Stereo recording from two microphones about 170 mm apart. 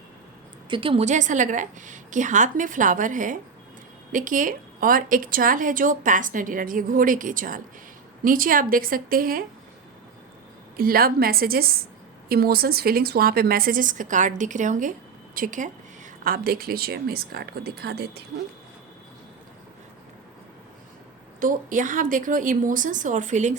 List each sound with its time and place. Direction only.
0.7 s a woman's voice: 30° right (ahead or behind); by 9.4 s 60° right (ahead or behind)
10.8 s a woman's voice: 60° right (ahead or behind)
16.2 s a woman's voice: 60° right (ahead or behind)
21.4 s a woman's voice: 50° right (ahead or behind)